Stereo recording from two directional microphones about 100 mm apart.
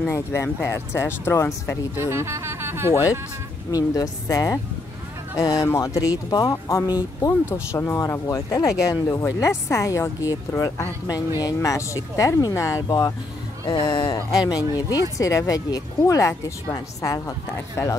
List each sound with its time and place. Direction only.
0.1 s speech: 30° left (ahead or behind)
2.0 s speech: 25° right (ahead or behind)
3.7 s speech: 35° left (ahead or behind)
13.7 s speech: 50° left (ahead or behind)
14.1 s speech: 40° left (ahead or behind)